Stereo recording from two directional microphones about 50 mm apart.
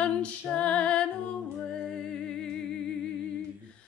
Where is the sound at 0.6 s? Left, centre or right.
Left.